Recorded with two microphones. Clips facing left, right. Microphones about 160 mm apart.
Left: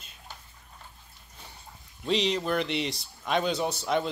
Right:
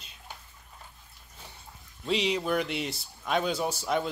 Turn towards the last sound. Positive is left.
turn(degrees=-5)  # may be behind; listen again after turning